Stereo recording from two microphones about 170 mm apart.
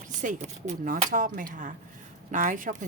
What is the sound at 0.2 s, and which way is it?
Speech, 45° right (ahead or behind).